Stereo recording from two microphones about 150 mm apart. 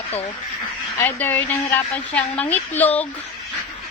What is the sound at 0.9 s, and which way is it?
A woman's voice, 10° left (ahead or behind).